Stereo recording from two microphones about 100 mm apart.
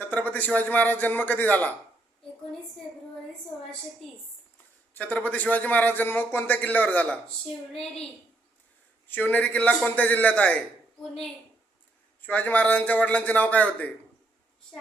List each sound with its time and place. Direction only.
0.0 s a man's voice: 15° left (ahead or behind)
4.9 s a man's voice: 15° left (ahead or behind)
9.0 s a man's voice: 15° left (ahead or behind)
12.2 s a man's voice: 15° left (ahead or behind)